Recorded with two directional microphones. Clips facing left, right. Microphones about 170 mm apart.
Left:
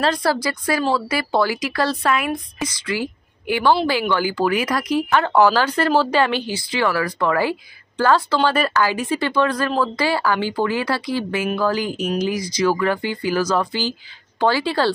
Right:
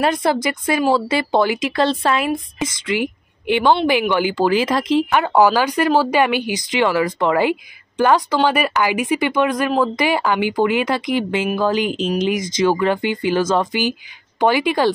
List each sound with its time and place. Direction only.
0.0 s speech: 20° right (ahead or behind)
5.2 s speech: 10° right (ahead or behind)